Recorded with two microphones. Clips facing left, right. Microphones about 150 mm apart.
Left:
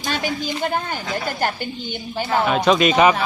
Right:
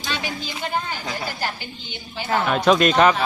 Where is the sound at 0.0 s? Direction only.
45° left (ahead or behind).